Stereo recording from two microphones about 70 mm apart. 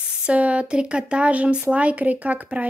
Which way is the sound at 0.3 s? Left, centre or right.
Centre.